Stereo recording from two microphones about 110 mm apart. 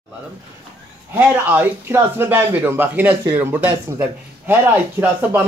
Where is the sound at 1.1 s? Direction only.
20° right (ahead or behind).